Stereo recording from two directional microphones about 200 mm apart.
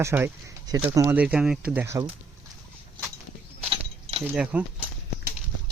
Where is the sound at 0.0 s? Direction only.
10° right (ahead or behind).